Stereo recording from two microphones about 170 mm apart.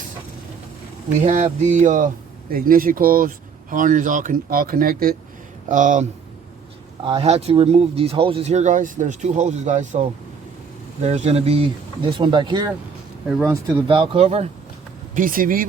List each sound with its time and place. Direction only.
1.2 s speech: 45° right (ahead or behind)
7.0 s speech: 30° right (ahead or behind)
11.0 s speech: 40° right (ahead or behind); by 12.7 s 25° right (ahead or behind)
13.4 s speech: 15° right (ahead or behind)
13.8 s speech: 30° right (ahead or behind)
15.1 s speech: 55° right (ahead or behind)